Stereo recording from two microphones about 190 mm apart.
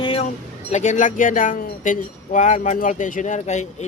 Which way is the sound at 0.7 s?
40° left (ahead or behind).